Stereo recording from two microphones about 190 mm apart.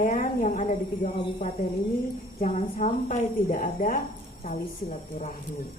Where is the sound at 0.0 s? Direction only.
40° left (ahead or behind).